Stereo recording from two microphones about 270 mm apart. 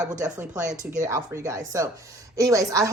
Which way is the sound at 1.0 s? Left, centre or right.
Centre.